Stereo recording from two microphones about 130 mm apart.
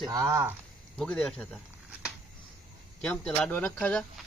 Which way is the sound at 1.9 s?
10° right (ahead or behind).